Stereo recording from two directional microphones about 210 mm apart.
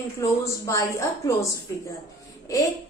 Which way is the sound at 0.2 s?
15° left (ahead or behind).